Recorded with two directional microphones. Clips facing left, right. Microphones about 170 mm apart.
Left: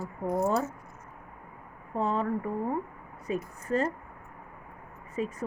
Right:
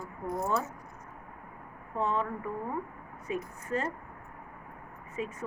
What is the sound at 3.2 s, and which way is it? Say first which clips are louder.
Speech: left 3 dB; 35° left (ahead or behind).